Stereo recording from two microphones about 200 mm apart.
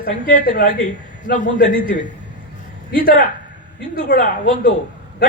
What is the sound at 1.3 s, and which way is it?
Speech, 40° left (ahead or behind).